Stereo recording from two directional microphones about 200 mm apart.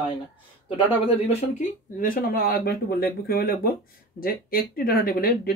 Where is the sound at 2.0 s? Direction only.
45° left (ahead or behind).